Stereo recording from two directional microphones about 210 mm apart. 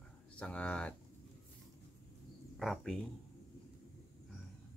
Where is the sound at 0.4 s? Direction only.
5° left (ahead or behind).